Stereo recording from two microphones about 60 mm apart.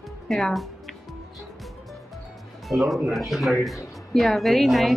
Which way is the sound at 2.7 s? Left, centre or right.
Centre.